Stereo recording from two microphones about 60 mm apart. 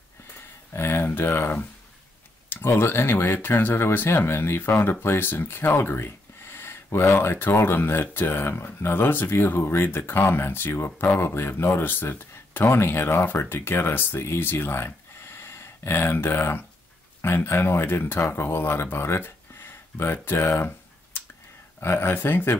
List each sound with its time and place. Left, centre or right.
0.7 s speech: left
21.7 s speech: left